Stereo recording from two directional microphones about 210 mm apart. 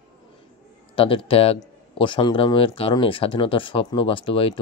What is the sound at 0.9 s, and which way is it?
A man's voice, 25° left (ahead or behind).